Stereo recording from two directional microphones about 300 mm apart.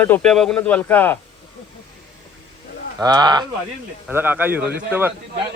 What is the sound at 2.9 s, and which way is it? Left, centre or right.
Speech, centre.